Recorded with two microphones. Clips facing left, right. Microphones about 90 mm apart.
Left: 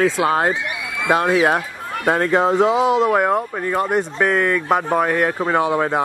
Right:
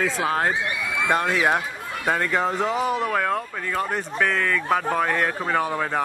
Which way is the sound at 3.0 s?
20° left (ahead or behind).